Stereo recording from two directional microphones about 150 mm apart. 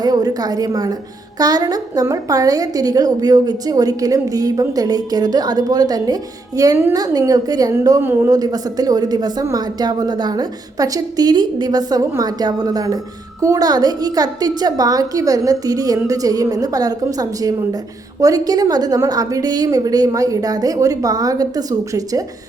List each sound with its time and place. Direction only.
0.0 s a woman's voice: 25° right (ahead or behind)